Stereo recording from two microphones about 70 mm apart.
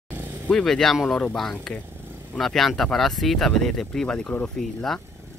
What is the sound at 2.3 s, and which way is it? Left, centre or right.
Speech, centre.